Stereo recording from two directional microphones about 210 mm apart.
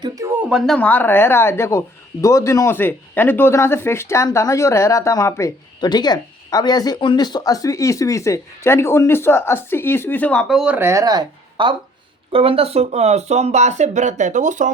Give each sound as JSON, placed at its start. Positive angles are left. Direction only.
{"t": 0.0, "sound": "speech", "side_deg": -15}